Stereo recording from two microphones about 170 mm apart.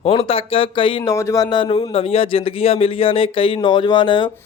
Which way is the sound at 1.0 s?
20° left (ahead or behind).